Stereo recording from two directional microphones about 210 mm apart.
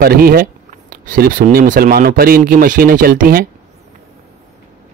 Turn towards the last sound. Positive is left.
turn(degrees=-45)  # may be behind; listen again after turning